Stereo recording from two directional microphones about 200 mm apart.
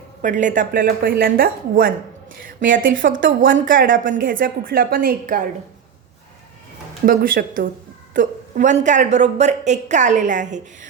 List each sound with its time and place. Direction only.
0.2 s a woman's voice: 40° right (ahead or behind)
7.0 s a woman's voice: 45° right (ahead or behind)